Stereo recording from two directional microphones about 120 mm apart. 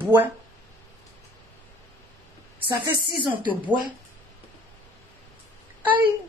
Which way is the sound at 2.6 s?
35° right (ahead or behind).